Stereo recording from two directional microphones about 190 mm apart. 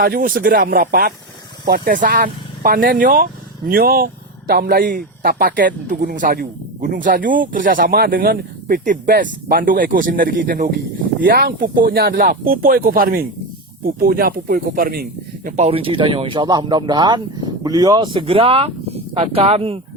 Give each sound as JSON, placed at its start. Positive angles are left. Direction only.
{"t": 0.0, "sound": "speech", "side_deg": -50}
{"t": 15.4, "sound": "speech", "side_deg": -35}